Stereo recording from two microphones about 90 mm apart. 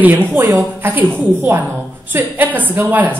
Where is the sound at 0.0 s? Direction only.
20° right (ahead or behind).